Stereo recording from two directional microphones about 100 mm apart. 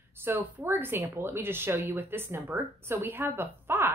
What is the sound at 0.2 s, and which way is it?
A woman's voice, 25° right (ahead or behind).